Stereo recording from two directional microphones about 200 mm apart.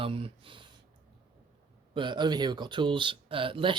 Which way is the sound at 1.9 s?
25° right (ahead or behind).